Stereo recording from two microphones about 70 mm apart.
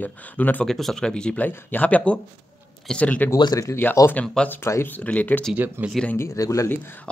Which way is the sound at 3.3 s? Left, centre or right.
Left.